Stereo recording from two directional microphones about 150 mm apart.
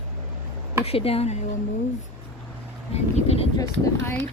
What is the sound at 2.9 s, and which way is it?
Speech, 45° left (ahead or behind).